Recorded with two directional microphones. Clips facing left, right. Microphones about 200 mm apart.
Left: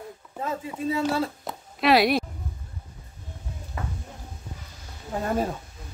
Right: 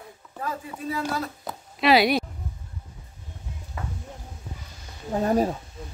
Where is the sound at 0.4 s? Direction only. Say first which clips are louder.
Left 3 dB; 25° left (ahead or behind).